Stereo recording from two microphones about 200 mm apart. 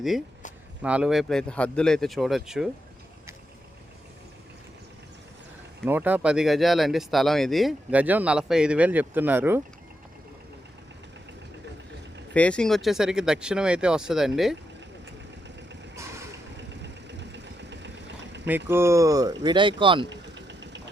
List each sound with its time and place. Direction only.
0.8 s speech: 5° right (ahead or behind)
5.8 s speech: 10° right (ahead or behind)
12.3 s speech: 5° left (ahead or behind)
16.8 s vehicle: 60° right (ahead or behind)
18.4 s speech: 10° right (ahead or behind)
20.1 s engine: 60° right (ahead or behind)